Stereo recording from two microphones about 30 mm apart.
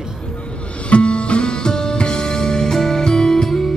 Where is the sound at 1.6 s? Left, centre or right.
Left.